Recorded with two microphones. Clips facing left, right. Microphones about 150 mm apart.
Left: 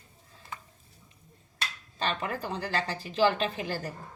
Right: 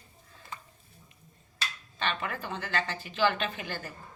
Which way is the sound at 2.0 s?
35° left (ahead or behind).